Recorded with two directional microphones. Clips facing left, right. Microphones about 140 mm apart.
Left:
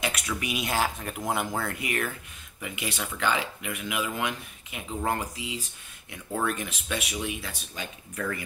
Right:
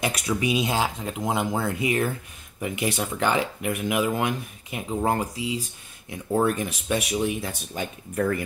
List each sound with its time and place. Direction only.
0.3 s speech: 25° right (ahead or behind)
2.6 s speech: 40° right (ahead or behind)